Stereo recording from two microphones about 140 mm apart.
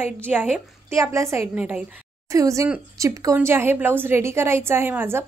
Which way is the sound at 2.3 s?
20° right (ahead or behind).